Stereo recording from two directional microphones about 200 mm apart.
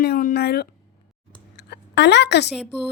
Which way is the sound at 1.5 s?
55° left (ahead or behind).